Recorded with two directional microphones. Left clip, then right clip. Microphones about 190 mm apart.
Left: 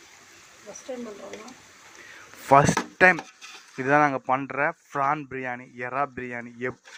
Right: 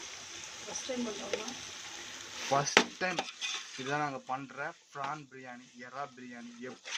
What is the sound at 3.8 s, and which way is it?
Speech, 30° left (ahead or behind).